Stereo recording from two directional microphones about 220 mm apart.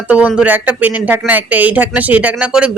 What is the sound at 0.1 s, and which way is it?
Speech, 5° right (ahead or behind).